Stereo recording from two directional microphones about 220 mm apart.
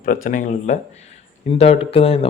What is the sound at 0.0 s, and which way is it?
A man's voice, 40° left (ahead or behind).